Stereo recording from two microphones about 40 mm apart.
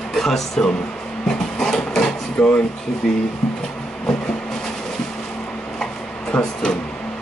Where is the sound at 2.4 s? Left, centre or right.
Left.